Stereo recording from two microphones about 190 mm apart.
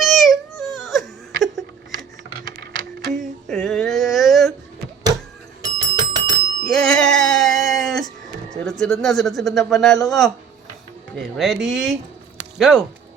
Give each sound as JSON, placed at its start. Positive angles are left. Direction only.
{"t": 0.0, "sound": "baby cry", "side_deg": 0}
{"t": 0.8, "sound": "a sound", "side_deg": 0}
{"t": 3.2, "sound": "a sound", "side_deg": 0}
{"t": 5.6, "sound": "bicycle bell", "side_deg": -20}
{"t": 6.7, "sound": "music", "side_deg": 5}
{"t": 8.8, "sound": "speech", "side_deg": 5}